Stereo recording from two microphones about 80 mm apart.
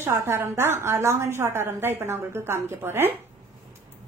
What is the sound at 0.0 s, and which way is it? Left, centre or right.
A woman's voice, right.